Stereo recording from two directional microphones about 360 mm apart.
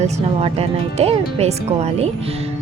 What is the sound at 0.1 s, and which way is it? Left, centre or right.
A woman's voice, centre.